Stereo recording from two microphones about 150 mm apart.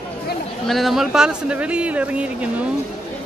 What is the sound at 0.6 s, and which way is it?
Speech, centre (ahead or behind).